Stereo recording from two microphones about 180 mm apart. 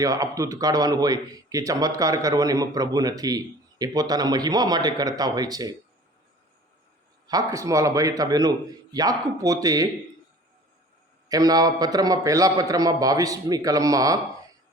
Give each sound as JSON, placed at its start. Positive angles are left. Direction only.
{"t": 0.0, "sound": "a man's voice", "side_deg": -20}
{"t": 7.3, "sound": "a man's voice", "side_deg": -20}
{"t": 11.3, "sound": "a man's voice", "side_deg": -20}